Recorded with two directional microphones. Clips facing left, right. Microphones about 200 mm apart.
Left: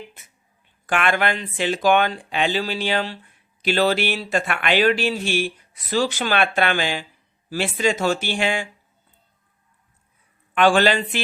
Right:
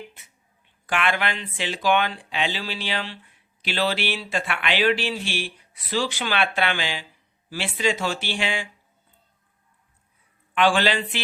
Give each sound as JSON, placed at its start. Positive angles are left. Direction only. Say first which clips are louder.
{"t": 0.9, "sound": "speech", "louder": "left 4 dB", "side_deg": 45}
{"t": 10.5, "sound": "speech", "louder": "left 4 dB", "side_deg": 45}